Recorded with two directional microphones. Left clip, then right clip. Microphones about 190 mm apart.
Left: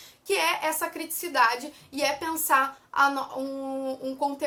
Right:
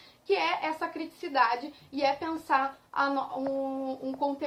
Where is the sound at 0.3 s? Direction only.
15° left (ahead or behind).